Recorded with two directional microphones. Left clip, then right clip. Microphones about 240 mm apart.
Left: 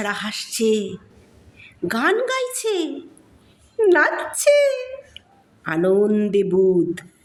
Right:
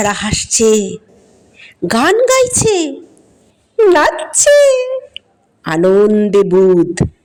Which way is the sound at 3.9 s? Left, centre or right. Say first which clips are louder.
Right 6 dB; right.